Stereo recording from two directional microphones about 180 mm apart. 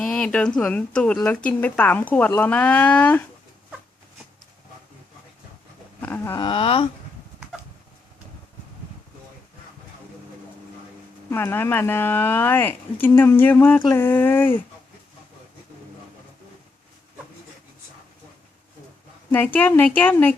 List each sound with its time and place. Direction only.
0.0 s speech: 5° left (ahead or behind)
6.0 s a sound: 10° left (ahead or behind)
6.4 s speech: 30° left (ahead or behind)
11.3 s speech: 15° left (ahead or behind)
19.3 s speech: 10° left (ahead or behind)